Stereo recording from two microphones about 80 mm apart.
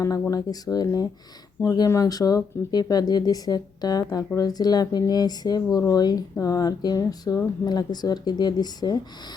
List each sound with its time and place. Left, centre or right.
0.0 s speech: left